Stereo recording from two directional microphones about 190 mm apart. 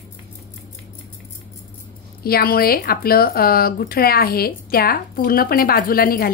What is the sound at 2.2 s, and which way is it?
Speech, 55° left (ahead or behind).